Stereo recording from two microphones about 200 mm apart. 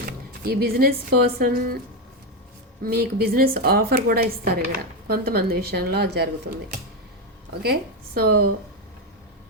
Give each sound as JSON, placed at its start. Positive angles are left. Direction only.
{"t": 0.0, "sound": "speech", "side_deg": -50}
{"t": 2.8, "sound": "a woman's voice", "side_deg": -50}
{"t": 7.6, "sound": "a woman's voice", "side_deg": -50}